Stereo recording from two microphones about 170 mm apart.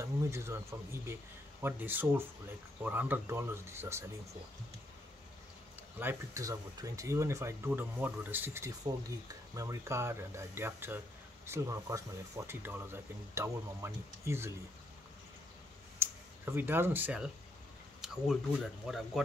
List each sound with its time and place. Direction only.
0.0 s speech: 15° right (ahead or behind)
5.9 s speech: 15° right (ahead or behind)
16.0 s speech: 15° right (ahead or behind)